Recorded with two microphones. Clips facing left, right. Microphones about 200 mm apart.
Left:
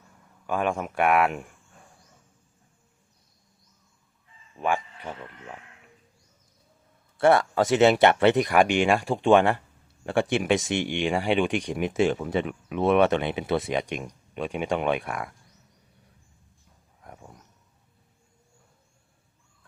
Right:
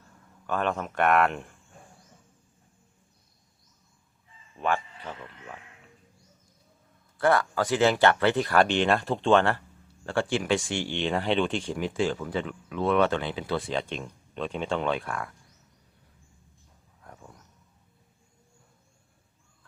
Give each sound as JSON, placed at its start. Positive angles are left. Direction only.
{"t": 0.4, "sound": "speech", "side_deg": 10}
{"t": 4.6, "sound": "speech", "side_deg": 15}
{"t": 7.2, "sound": "speech", "side_deg": 25}